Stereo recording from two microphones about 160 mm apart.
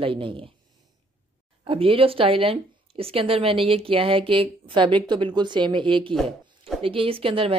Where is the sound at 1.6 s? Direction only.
35° right (ahead or behind).